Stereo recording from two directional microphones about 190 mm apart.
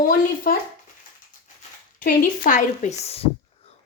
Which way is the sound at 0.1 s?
50° left (ahead or behind).